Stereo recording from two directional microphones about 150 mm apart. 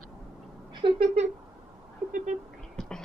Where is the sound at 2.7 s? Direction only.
5° left (ahead or behind).